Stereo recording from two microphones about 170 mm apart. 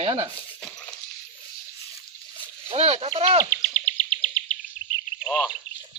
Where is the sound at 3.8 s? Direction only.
30° right (ahead or behind).